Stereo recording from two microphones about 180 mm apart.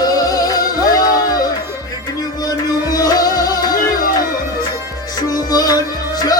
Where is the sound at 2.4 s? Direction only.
20° left (ahead or behind).